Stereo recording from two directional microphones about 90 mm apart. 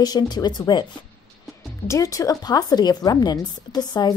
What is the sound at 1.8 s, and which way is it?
A woman's voice, 40° left (ahead or behind).